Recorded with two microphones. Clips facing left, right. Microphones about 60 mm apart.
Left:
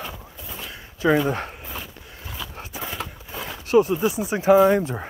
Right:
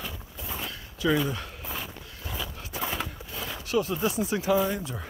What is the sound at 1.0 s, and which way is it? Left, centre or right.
Speech, left.